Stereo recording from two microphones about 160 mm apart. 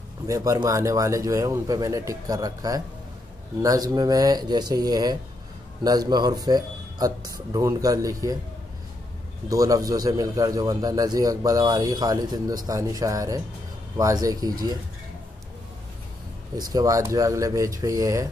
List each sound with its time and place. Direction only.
0.3 s a man's voice: 20° right (ahead or behind)
9.5 s a man's voice: 20° right (ahead or behind)
16.7 s a man's voice: 20° right (ahead or behind)